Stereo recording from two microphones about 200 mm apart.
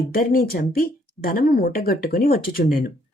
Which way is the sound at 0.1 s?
45° left (ahead or behind).